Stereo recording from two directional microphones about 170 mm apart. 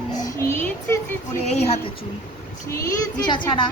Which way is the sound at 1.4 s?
40° left (ahead or behind).